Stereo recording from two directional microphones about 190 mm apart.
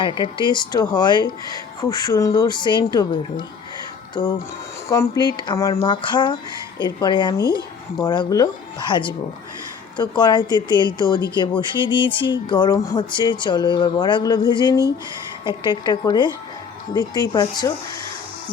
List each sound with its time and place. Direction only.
0.0 s speech: 25° left (ahead or behind)